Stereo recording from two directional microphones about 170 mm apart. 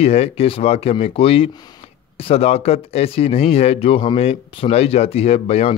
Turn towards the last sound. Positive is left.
turn(degrees=35)  # may be behind; listen again after turning